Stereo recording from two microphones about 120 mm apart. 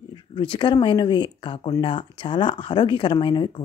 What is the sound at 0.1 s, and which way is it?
A woman's voice, 40° left (ahead or behind).